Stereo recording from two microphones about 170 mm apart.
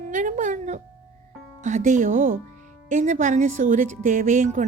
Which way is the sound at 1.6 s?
45° right (ahead or behind).